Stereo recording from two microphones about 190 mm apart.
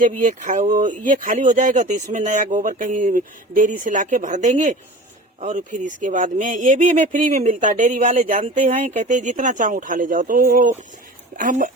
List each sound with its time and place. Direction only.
0.0 s speech: 40° right (ahead or behind)